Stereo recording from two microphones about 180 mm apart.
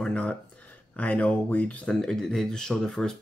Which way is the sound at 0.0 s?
5° left (ahead or behind).